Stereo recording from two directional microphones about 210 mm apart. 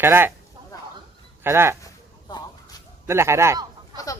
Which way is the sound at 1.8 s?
20° left (ahead or behind).